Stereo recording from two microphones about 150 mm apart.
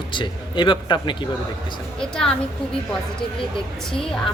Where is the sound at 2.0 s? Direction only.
5° left (ahead or behind).